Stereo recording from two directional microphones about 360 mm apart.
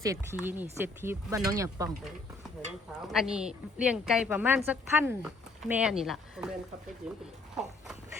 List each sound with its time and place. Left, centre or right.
0.0 s speech: centre
3.1 s a woman's voice: centre
7.5 s a sound: centre